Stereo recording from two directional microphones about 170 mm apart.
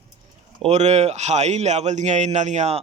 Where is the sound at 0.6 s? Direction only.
40° right (ahead or behind).